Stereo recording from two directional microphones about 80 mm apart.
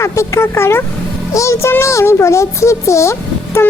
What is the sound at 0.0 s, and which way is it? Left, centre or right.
Speech, left.